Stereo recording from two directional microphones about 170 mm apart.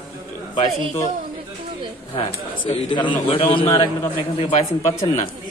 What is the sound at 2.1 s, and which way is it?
A man's voice, 35° left (ahead or behind).